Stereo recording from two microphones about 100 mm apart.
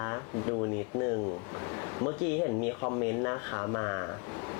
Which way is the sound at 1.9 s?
20° left (ahead or behind).